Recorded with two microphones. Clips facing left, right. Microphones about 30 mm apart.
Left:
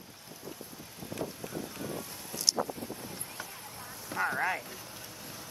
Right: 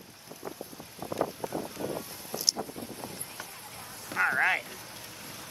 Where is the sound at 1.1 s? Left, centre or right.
Right.